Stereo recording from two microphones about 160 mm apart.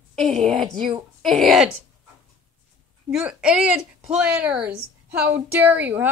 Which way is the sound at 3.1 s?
5° right (ahead or behind).